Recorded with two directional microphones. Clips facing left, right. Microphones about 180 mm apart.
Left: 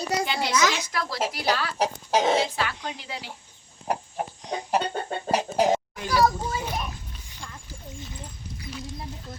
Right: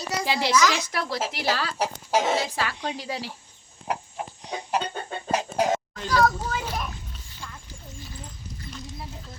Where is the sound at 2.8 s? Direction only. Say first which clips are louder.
Right 4 dB; 35° right (ahead or behind).